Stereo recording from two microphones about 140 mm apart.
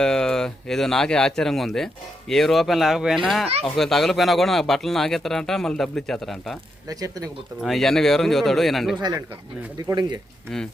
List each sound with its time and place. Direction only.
0.0 s speech: 5° left (ahead or behind)
6.8 s speech: 25° right (ahead or behind)
7.6 s speech: centre (ahead or behind)
9.0 s speech: 30° right (ahead or behind)